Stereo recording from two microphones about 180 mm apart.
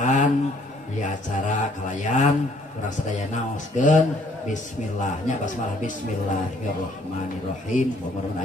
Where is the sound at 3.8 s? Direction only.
45° left (ahead or behind).